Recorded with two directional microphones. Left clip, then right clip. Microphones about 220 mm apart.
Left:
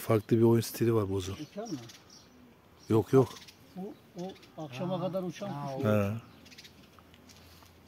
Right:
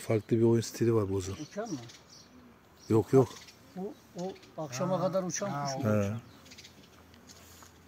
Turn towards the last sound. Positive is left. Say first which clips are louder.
# left 1 dB
turn(degrees=5)  # may be behind; listen again after turning